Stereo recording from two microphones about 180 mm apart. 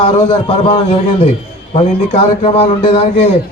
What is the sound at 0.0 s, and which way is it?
A man's voice, 30° left (ahead or behind).